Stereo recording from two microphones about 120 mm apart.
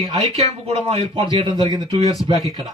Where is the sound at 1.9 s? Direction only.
60° right (ahead or behind).